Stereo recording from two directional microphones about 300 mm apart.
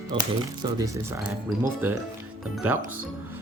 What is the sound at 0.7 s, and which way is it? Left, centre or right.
Speech, centre.